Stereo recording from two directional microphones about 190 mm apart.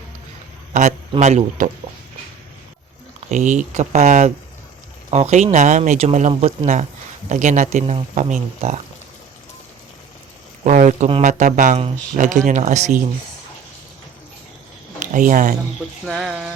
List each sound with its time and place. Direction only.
0.7 s a man's voice: 40° right (ahead or behind)
3.2 s speech: 40° right (ahead or behind)
10.6 s speech: 40° right (ahead or behind)
14.9 s speech: 45° right (ahead or behind)
16.0 s music: 5° right (ahead or behind)